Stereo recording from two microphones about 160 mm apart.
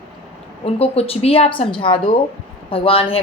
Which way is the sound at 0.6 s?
40° left (ahead or behind).